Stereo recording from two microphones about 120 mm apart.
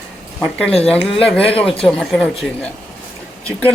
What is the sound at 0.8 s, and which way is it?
Speech, 5° left (ahead or behind).